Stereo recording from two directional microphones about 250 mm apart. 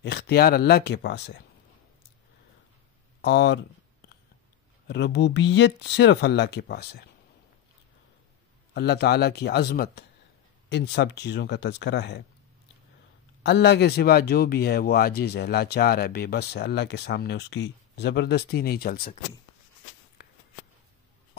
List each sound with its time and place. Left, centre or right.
0.0 s speech: left
3.2 s speech: left
4.8 s speech: left
8.7 s speech: left
13.4 s speech: left